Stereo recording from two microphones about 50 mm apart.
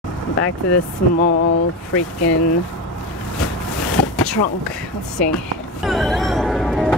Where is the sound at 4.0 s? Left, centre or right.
Centre.